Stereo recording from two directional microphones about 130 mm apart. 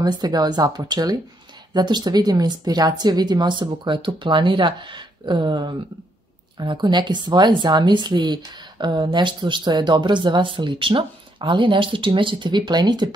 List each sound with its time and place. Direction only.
0.0 s speech: 30° right (ahead or behind)